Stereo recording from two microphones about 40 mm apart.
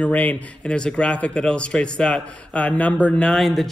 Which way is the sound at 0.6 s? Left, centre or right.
Left.